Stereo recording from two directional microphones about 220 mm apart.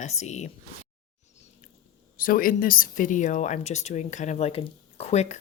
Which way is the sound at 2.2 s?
40° left (ahead or behind).